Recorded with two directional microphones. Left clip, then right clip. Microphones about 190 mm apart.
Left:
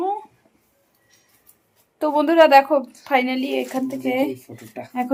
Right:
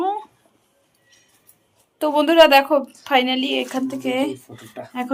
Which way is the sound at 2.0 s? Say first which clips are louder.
Right 1 dB; centre (ahead or behind).